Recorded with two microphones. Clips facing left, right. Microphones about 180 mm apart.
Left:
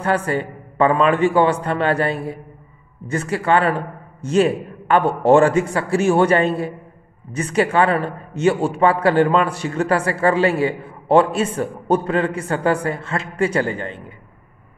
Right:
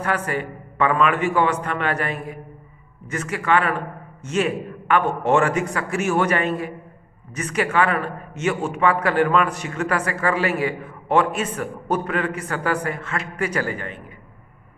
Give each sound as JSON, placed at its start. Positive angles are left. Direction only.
{"t": 0.0, "sound": "a man's voice", "side_deg": 30}